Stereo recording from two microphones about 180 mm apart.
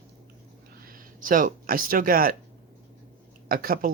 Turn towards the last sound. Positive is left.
turn(degrees=-55)  # may be behind; listen again after turning